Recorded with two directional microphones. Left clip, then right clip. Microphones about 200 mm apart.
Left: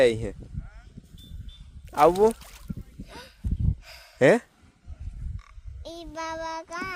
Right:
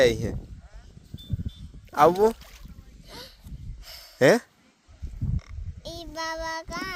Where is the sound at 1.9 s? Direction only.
Centre (ahead or behind).